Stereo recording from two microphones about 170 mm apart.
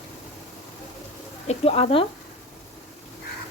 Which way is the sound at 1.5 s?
35° left (ahead or behind).